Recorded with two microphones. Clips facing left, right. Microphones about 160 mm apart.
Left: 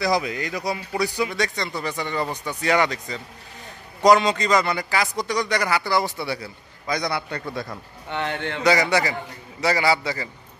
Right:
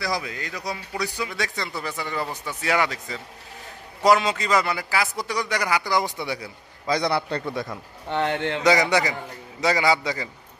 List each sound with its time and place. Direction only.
0.0 s a man's voice: 20° left (ahead or behind)
1.3 s a man's voice: 5° right (ahead or behind)
6.9 s speech: 30° right (ahead or behind)